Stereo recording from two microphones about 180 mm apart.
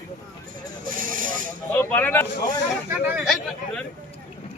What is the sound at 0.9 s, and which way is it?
Vehicle, 50° right (ahead or behind).